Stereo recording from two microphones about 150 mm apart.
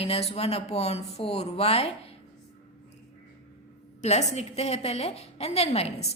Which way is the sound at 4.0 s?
50° left (ahead or behind).